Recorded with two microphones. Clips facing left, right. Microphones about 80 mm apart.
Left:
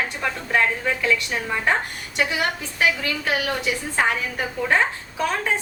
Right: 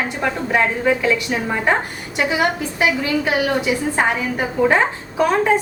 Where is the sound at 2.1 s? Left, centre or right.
Centre.